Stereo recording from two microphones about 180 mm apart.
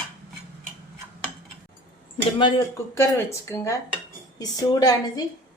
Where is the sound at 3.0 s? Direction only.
15° left (ahead or behind).